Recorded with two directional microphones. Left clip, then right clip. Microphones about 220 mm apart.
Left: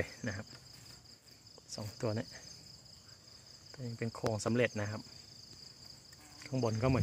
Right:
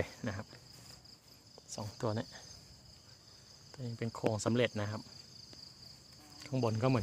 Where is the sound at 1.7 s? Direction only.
Centre (ahead or behind).